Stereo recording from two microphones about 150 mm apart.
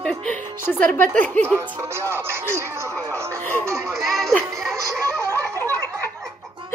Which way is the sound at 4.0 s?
Centre (ahead or behind).